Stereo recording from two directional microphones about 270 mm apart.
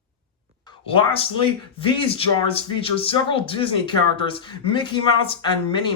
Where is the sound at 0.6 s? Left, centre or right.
Centre.